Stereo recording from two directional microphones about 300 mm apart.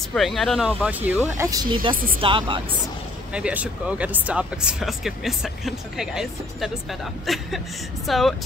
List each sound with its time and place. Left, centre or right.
0.1 s speech: centre
3.3 s speech: centre